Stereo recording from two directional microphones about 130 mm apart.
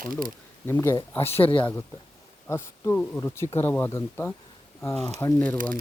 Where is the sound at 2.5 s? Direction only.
15° left (ahead or behind).